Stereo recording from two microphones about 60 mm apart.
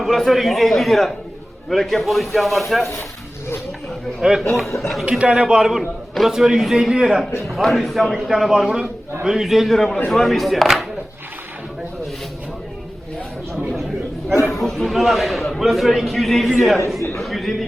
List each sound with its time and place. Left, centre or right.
0.0 s a man's voice: centre
4.2 s a man's voice: centre
5.0 s a man's voice: centre
7.4 s a man's voice: centre
14.6 s a man's voice: centre
17.2 s a sound: centre